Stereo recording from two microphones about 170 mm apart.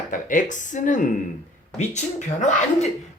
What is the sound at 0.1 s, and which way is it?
Speech, 50° left (ahead or behind).